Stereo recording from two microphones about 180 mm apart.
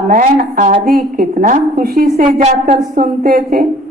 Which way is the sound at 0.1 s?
50° right (ahead or behind).